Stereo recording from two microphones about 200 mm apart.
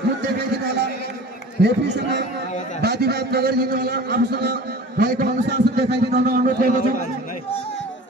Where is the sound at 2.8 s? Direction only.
55° right (ahead or behind).